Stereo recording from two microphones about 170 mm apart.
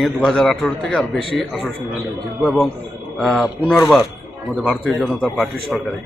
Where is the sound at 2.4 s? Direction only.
Centre (ahead or behind).